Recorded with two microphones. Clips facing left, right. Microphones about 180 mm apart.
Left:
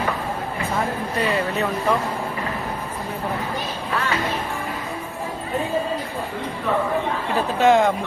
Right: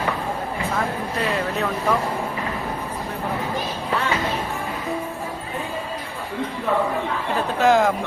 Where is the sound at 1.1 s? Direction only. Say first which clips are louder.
Left 2 dB; centre (ahead or behind).